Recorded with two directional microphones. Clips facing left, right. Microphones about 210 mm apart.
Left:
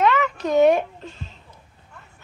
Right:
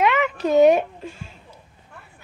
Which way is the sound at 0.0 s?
10° right (ahead or behind).